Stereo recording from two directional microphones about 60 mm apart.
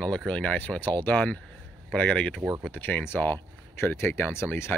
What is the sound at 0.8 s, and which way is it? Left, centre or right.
Speech, left.